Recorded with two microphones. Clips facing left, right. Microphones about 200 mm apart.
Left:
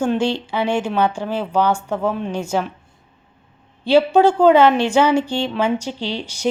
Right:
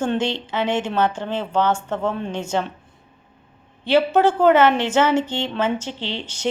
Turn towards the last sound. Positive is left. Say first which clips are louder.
# left 3 dB
turn(degrees=10)  # may be behind; listen again after turning